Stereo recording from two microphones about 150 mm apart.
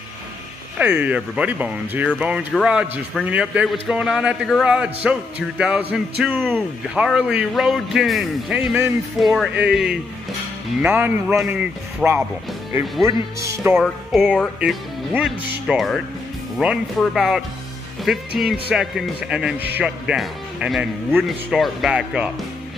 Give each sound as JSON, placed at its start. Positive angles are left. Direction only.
{"t": 0.7, "sound": "a man's voice", "side_deg": -10}
{"t": 13.0, "sound": "speech", "side_deg": -20}
{"t": 13.7, "sound": "a man's voice", "side_deg": 0}